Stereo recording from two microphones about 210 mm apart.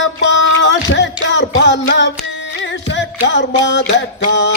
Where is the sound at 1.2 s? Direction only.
55° left (ahead or behind).